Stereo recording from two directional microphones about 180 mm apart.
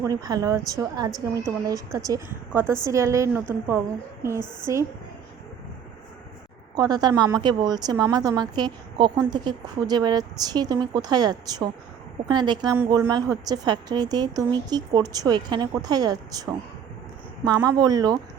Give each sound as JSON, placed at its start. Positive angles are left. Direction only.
{"t": 0.0, "sound": "a woman's voice", "side_deg": -20}
{"t": 6.7, "sound": "a woman's voice", "side_deg": -20}
{"t": 17.4, "sound": "a woman's voice", "side_deg": -20}